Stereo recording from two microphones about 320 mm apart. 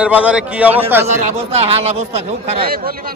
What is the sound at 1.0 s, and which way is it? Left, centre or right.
Speech, centre.